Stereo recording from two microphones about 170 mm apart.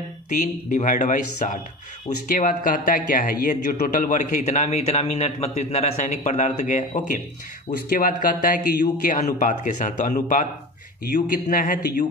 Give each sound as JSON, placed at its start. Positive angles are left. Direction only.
{"t": 0.3, "sound": "a man's voice", "side_deg": 45}
{"t": 7.9, "sound": "a man's voice", "side_deg": 55}